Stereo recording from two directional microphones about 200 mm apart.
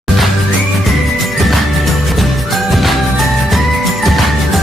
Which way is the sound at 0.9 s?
Centre (ahead or behind).